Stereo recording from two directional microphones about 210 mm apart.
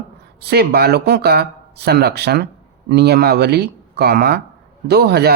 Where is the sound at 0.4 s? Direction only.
50° right (ahead or behind).